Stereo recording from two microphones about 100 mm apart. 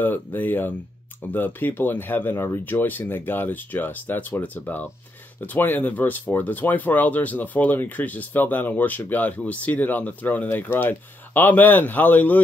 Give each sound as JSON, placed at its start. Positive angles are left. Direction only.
{"t": 0.0, "sound": "speech", "side_deg": 20}